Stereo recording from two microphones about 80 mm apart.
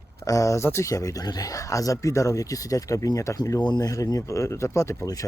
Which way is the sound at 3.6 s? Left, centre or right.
Left.